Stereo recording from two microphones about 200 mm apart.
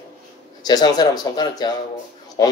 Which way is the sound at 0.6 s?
20° left (ahead or behind).